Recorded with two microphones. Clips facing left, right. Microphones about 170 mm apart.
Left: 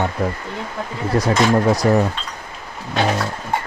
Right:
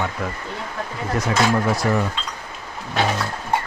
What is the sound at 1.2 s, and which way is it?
Speech, 40° left (ahead or behind).